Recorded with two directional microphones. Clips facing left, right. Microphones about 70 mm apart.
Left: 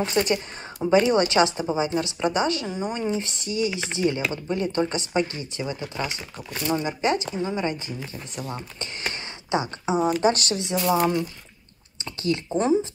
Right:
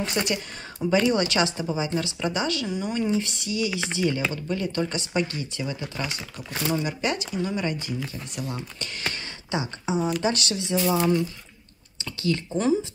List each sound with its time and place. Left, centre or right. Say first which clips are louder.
0.0 s speech: left 4 dB; left